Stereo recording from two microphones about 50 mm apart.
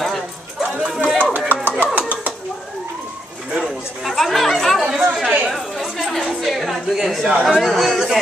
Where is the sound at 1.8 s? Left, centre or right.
Right.